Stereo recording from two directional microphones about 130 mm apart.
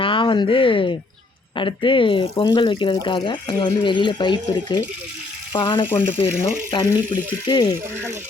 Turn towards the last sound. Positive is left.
turn(degrees=35)  # may be behind; listen again after turning